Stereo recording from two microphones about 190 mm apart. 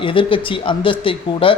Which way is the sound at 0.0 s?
25° left (ahead or behind).